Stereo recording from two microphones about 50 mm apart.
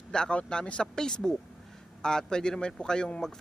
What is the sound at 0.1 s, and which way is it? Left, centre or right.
Speech, centre.